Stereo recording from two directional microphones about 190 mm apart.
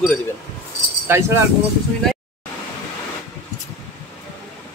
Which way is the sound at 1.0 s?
15° right (ahead or behind).